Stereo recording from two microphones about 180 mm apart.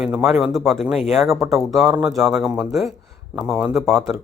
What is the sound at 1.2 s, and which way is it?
Speech, 15° right (ahead or behind).